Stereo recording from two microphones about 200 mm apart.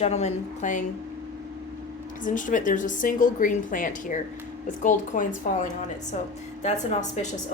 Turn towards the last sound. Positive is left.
turn(degrees=35)  # may be behind; listen again after turning